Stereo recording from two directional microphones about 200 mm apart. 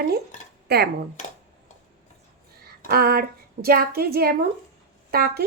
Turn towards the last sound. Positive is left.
turn(degrees=-50)  # may be behind; listen again after turning